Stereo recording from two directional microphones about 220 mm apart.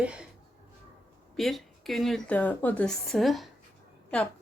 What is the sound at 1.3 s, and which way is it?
A woman's voice, centre (ahead or behind).